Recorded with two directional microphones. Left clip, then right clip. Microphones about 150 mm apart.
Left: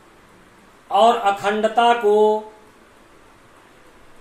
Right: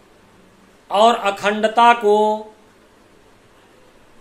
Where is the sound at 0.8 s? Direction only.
35° right (ahead or behind).